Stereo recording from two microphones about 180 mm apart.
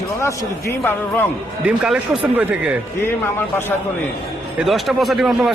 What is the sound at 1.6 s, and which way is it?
Speech, 5° right (ahead or behind).